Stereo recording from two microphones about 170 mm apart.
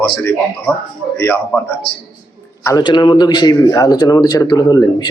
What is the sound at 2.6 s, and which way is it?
A man's voice, 25° left (ahead or behind).